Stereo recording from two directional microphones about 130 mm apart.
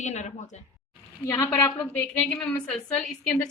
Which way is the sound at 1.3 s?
20° left (ahead or behind).